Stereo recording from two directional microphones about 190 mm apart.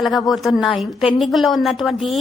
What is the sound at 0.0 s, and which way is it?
A woman's voice, centre (ahead or behind).